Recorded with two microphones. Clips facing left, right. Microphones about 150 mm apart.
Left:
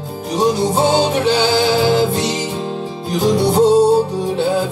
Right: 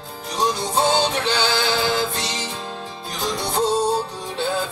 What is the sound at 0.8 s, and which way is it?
Music, 10° left (ahead or behind).